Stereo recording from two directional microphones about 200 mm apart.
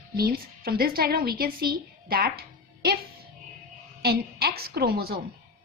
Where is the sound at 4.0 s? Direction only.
50° right (ahead or behind).